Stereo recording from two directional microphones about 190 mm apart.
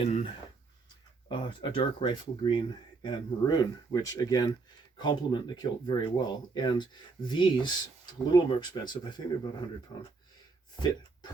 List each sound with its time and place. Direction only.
0.0 s speech: 35° left (ahead or behind)
1.3 s speech: 25° left (ahead or behind)